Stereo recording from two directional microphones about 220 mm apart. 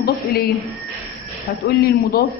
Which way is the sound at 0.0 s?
45° left (ahead or behind).